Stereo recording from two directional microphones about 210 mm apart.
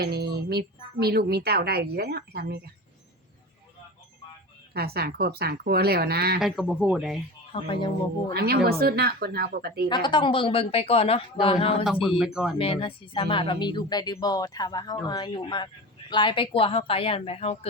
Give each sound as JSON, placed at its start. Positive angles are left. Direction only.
{"t": 0.0, "sound": "a woman's voice", "side_deg": -50}
{"t": 4.7, "sound": "a woman's voice", "side_deg": -50}
{"t": 6.4, "sound": "speech", "side_deg": 0}
{"t": 7.5, "sound": "speech", "side_deg": 25}
{"t": 8.3, "sound": "a woman's voice", "side_deg": -45}
{"t": 9.9, "sound": "speech", "side_deg": 20}
{"t": 12.0, "sound": "speech", "side_deg": 0}
{"t": 12.5, "sound": "speech", "side_deg": 25}